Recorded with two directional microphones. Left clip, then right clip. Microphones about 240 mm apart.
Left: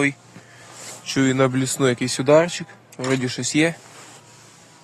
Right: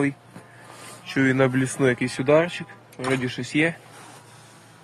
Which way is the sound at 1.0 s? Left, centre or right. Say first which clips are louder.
Left 1 dB; centre.